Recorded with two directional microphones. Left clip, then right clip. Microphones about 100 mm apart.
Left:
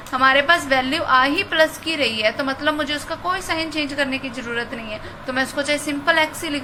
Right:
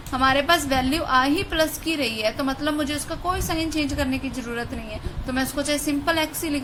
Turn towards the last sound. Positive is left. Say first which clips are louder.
# left 5 dB
turn(degrees=-60)  # may be behind; listen again after turning